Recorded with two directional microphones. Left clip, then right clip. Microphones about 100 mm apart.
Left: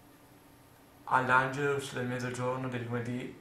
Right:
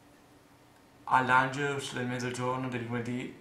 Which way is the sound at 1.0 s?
5° left (ahead or behind).